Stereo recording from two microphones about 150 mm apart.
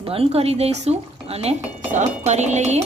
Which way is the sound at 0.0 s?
40° right (ahead or behind).